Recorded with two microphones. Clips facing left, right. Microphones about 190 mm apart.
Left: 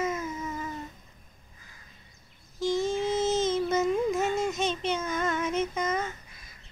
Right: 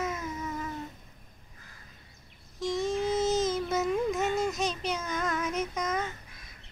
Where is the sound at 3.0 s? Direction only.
25° left (ahead or behind).